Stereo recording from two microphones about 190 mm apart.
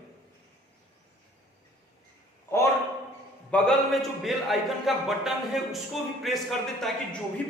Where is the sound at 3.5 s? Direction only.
5° left (ahead or behind).